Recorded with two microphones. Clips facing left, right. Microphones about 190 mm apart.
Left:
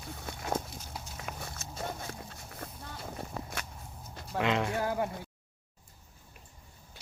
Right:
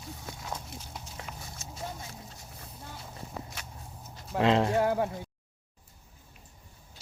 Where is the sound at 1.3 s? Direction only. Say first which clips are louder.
Left 5 dB; 60° left (ahead or behind).